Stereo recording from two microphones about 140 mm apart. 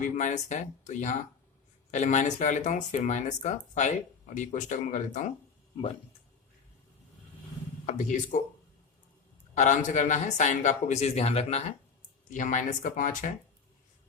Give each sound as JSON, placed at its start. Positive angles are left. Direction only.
{"t": 0.2, "sound": "speech", "side_deg": 60}
{"t": 7.9, "sound": "speech", "side_deg": 60}
{"t": 9.6, "sound": "speech", "side_deg": 65}
{"t": 12.3, "sound": "speech", "side_deg": 65}